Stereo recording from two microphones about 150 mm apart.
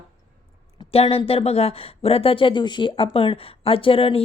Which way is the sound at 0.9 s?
40° left (ahead or behind).